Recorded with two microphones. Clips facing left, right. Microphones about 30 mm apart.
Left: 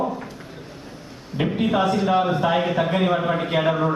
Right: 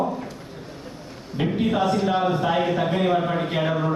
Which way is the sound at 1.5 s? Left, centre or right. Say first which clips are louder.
Left 2 dB; centre.